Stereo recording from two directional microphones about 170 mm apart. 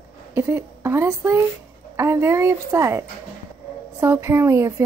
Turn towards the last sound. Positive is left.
turn(degrees=-15)  # may be behind; listen again after turning